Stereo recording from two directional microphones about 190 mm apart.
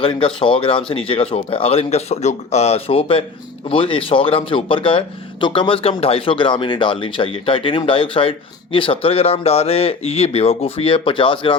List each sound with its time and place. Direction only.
0.0 s speech: 25° left (ahead or behind)